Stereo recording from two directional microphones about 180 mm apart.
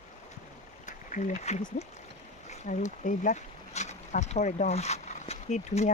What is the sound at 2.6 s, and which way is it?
Speech, 45° left (ahead or behind).